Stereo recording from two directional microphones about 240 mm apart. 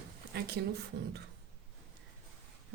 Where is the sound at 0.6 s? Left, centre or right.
Right.